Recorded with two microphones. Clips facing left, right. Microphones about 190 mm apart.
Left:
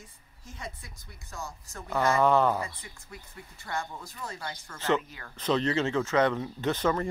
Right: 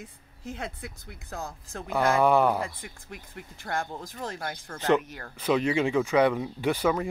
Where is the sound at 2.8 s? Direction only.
55° right (ahead or behind).